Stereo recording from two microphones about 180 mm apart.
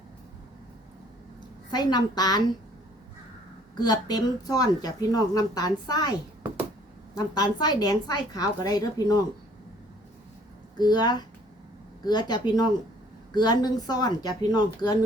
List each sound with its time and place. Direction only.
1.7 s speech: 25° left (ahead or behind)
3.8 s speech: 20° left (ahead or behind)
7.3 s speech: 20° left (ahead or behind)
10.8 s speech: 25° left (ahead or behind)